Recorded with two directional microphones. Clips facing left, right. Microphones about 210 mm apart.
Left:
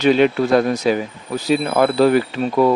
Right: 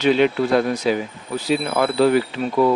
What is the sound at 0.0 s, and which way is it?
Speech, 45° left (ahead or behind).